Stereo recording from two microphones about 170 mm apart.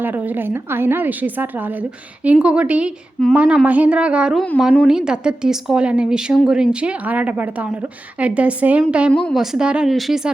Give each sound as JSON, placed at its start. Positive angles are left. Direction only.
{"t": 0.0, "sound": "speech", "side_deg": -10}